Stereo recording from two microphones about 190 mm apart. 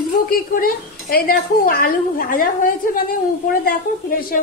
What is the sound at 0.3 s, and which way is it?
A woman's voice, 50° left (ahead or behind).